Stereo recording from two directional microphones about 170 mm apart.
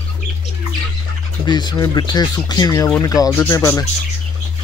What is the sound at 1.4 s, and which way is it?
Speech, 25° left (ahead or behind).